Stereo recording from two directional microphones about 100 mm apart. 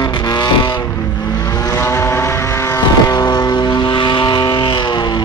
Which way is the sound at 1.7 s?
25° left (ahead or behind).